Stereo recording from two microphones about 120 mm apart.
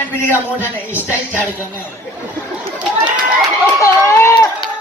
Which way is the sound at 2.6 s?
10° right (ahead or behind).